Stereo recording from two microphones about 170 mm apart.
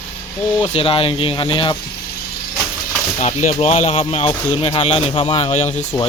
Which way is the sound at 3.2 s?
45° left (ahead or behind).